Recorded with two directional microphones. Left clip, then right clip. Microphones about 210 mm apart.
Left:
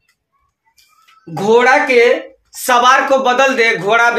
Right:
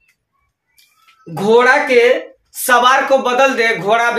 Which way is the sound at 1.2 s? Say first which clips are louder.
Even; 10° left (ahead or behind).